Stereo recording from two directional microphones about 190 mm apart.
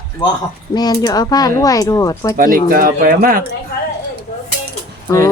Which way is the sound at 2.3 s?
45° right (ahead or behind).